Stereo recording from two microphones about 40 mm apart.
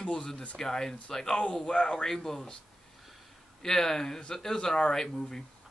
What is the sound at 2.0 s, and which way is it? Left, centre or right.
Speech, centre.